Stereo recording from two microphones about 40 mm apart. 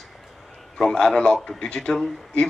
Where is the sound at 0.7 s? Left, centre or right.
Centre.